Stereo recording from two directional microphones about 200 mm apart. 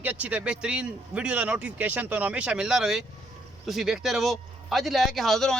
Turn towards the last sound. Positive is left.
turn(degrees=0)  # may be behind; listen again after turning